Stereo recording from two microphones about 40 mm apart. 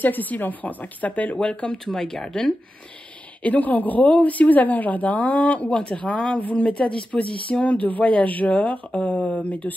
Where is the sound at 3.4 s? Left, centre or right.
Left.